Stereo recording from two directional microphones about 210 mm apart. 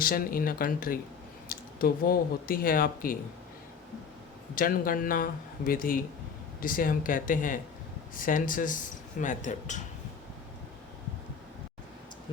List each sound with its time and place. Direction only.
0.0 s speech: 45° left (ahead or behind)
4.5 s speech: 40° left (ahead or behind)